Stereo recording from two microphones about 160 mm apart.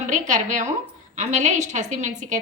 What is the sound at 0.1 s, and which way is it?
A woman's voice, 50° right (ahead or behind).